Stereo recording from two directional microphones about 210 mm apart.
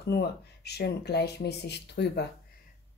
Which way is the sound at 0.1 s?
50° left (ahead or behind).